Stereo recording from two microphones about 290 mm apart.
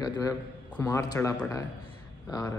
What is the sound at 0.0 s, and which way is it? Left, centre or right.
A man's voice, centre.